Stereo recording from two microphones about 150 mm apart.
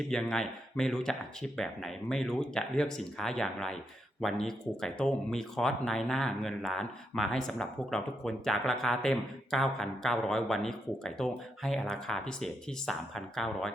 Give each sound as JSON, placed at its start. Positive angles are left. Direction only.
{"t": 0.1, "sound": "speech", "side_deg": 5}